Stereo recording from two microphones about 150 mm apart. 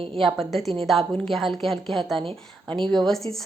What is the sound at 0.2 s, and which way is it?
A woman's voice, centre (ahead or behind).